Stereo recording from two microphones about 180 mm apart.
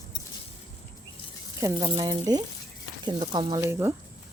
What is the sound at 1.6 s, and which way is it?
Speech, 25° right (ahead or behind).